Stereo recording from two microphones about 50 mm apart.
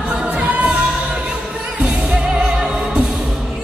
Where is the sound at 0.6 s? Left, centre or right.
Right.